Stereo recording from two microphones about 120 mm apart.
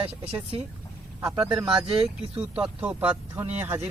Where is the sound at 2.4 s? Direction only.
10° right (ahead or behind).